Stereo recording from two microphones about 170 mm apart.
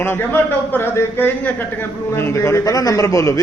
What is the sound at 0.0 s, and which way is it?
A man's voice, 15° left (ahead or behind).